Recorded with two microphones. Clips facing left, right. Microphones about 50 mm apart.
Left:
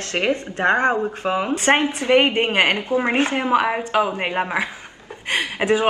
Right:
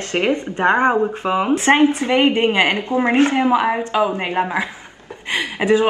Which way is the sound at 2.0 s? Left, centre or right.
Left.